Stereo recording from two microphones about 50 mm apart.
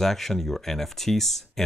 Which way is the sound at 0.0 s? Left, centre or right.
Centre.